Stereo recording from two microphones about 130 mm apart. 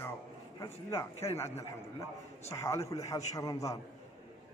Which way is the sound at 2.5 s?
25° left (ahead or behind).